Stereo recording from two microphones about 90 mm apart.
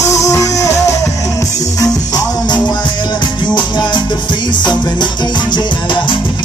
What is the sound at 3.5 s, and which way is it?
Music, 55° left (ahead or behind).